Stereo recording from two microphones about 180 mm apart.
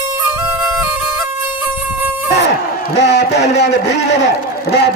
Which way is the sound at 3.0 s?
65° left (ahead or behind).